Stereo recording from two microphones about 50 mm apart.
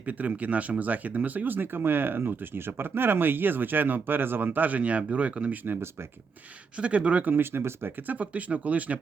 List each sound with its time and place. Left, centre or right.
0.0 s speech: right
6.7 s speech: right
7.3 s speech: right
8.0 s speech: right